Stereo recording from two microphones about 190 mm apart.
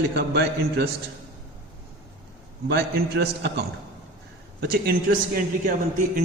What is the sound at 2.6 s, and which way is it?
A man's voice, 55° right (ahead or behind).